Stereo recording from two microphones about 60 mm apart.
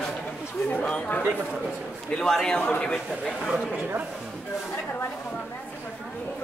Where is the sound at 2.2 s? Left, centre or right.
Centre.